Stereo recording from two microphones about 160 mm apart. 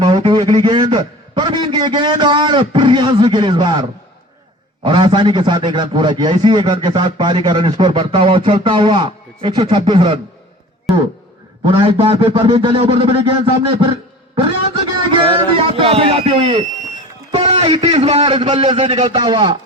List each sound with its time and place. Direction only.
0.0 s a sound: 30° right (ahead or behind)
4.8 s a man's voice: 30° right (ahead or behind)
11.8 s a man's voice: 35° right (ahead or behind)
18.8 s a man's voice: 45° right (ahead or behind)
19.1 s a man's voice: 25° right (ahead or behind)